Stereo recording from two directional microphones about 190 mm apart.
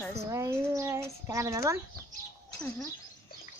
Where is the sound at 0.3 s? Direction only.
15° right (ahead or behind).